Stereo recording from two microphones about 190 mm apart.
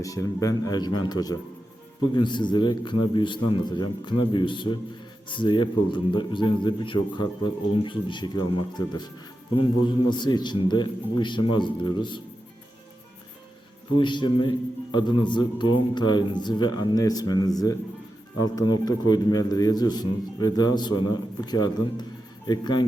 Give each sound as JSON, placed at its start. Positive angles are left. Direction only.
{"t": 0.0, "sound": "a man's voice", "side_deg": 15}
{"t": 14.0, "sound": "a man's voice", "side_deg": 25}